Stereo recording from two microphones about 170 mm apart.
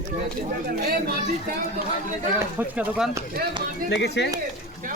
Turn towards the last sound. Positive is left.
turn(degrees=90)